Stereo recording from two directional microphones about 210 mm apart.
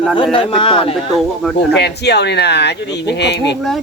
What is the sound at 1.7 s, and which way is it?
Speech, 55° left (ahead or behind).